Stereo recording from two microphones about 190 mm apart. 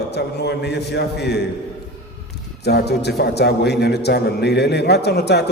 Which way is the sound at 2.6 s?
60° left (ahead or behind).